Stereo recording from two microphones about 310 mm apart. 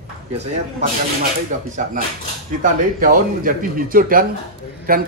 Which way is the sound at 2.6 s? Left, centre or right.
Right.